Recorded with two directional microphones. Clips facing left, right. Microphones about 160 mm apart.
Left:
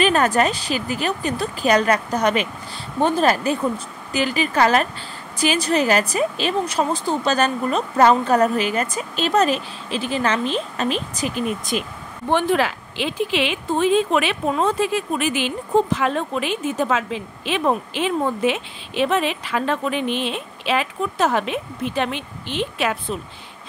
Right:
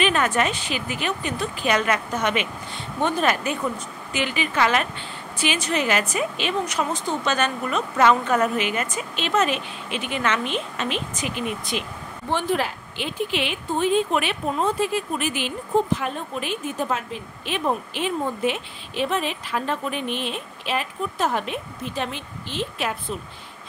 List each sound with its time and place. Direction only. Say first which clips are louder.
0.0 s a woman's voice: left 4 dB; 40° left (ahead or behind)
12.3 s speech: left 5 dB; 70° left (ahead or behind)